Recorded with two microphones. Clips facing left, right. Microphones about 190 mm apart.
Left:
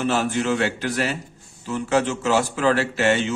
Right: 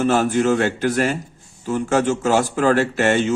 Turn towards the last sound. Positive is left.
turn(degrees=-45)  # may be behind; listen again after turning